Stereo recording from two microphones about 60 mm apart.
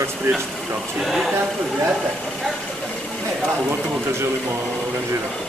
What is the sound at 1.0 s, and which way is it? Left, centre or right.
Speech, centre.